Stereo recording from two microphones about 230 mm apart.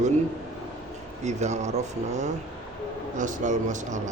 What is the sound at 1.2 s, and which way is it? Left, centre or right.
Speech, right.